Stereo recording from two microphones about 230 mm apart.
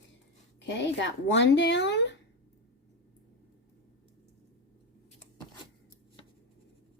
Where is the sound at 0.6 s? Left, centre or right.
Left.